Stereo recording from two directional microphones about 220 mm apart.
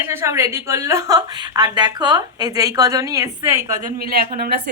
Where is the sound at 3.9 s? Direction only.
45° right (ahead or behind).